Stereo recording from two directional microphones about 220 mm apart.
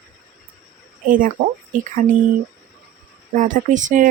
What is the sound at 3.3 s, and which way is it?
Speech, 35° right (ahead or behind).